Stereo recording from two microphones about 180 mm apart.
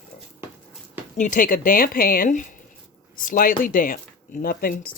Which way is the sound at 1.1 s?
45° left (ahead or behind).